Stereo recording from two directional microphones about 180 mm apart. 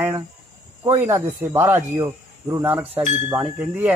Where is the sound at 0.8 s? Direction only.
15° right (ahead or behind).